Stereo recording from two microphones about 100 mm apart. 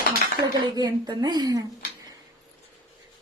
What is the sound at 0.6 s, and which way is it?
Speech, 40° right (ahead or behind).